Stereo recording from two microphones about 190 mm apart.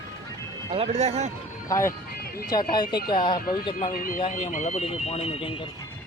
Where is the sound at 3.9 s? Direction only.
45° left (ahead or behind); by 5.5 s 30° left (ahead or behind).